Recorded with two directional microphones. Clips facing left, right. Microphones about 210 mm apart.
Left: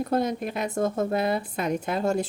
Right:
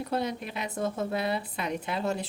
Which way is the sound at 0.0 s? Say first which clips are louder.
Left 5 dB; 45° left (ahead or behind).